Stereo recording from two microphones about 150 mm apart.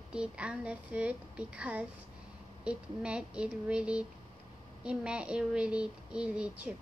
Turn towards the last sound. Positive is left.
turn(degrees=-5)  # may be behind; listen again after turning